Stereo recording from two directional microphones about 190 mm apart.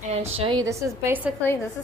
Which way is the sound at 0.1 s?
35° right (ahead or behind).